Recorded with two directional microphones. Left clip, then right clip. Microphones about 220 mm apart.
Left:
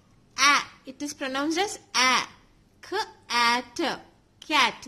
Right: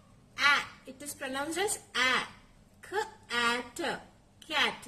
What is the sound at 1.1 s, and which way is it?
A woman's voice, 50° left (ahead or behind).